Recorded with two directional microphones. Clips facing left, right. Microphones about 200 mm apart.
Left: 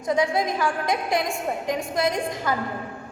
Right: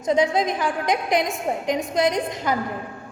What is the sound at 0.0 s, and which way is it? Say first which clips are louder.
A woman's voice: right 3 dB; 20° right (ahead or behind).